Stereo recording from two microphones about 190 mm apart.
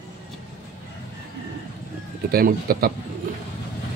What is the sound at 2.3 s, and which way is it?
Speech, 50° right (ahead or behind).